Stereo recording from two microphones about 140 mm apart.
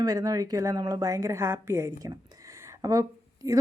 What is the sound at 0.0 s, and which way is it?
A woman's voice, 25° right (ahead or behind).